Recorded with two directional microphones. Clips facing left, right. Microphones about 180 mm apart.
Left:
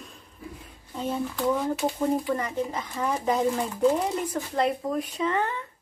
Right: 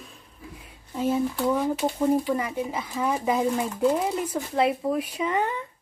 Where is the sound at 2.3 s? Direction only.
10° right (ahead or behind).